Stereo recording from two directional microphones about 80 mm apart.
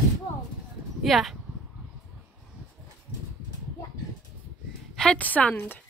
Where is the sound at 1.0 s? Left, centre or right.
Centre.